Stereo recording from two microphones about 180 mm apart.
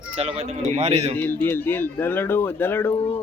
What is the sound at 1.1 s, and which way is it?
Speech, 10° left (ahead or behind).